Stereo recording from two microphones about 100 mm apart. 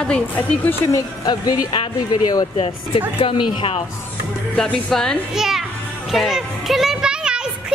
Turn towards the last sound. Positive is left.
turn(degrees=-10)  # may be behind; listen again after turning